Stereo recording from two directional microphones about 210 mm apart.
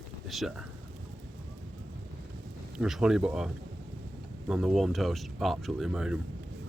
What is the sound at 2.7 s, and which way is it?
Speech, 5° right (ahead or behind).